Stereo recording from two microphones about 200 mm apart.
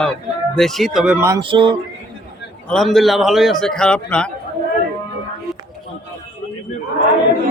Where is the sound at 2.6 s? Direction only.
Centre (ahead or behind).